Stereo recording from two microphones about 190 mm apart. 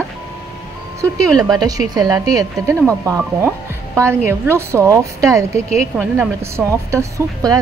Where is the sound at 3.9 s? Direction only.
15° right (ahead or behind).